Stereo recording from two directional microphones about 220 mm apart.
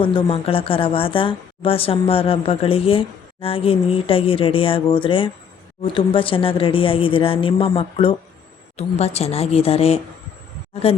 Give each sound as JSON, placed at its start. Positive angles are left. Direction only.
{"t": 0.0, "sound": "speech", "side_deg": 25}